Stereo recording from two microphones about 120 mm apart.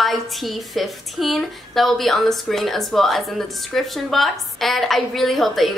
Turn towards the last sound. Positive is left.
turn(degrees=0)  # may be behind; listen again after turning